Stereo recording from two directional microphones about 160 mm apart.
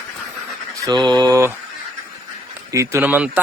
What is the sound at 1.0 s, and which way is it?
Mantra, 25° right (ahead or behind).